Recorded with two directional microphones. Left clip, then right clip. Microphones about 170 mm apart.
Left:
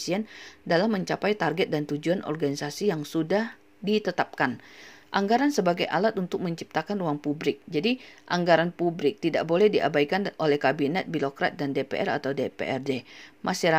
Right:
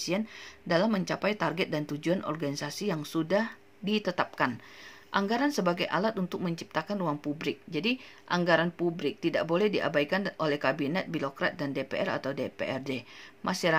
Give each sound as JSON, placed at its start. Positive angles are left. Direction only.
{"t": 0.7, "sound": "a woman's voice", "side_deg": 30}